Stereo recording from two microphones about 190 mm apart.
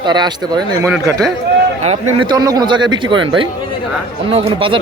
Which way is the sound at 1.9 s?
25° right (ahead or behind).